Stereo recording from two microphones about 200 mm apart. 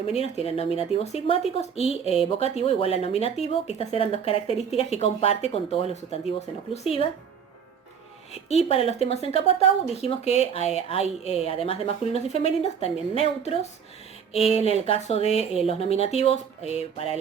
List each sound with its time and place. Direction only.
0.1 s speech: 30° left (ahead or behind)
8.3 s speech: 30° left (ahead or behind)